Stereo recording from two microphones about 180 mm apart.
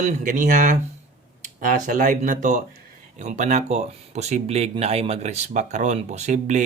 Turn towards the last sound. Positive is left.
turn(degrees=-40)  # may be behind; listen again after turning